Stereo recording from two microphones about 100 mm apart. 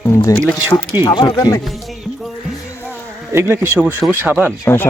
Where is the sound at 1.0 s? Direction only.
45° left (ahead or behind).